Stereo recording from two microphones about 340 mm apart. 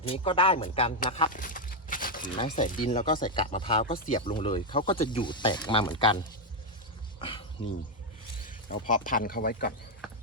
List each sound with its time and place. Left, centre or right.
0.0 s speech: centre
7.2 s beatboxing: centre
8.4 s speech: left